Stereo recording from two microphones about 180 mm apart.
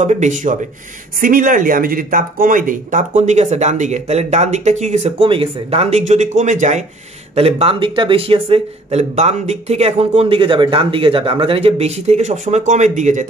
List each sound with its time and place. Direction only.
0.0 s speech: 40° right (ahead or behind)